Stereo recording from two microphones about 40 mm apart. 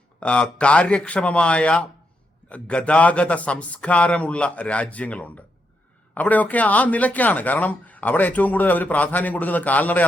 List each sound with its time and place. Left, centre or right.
0.2 s a man's voice: left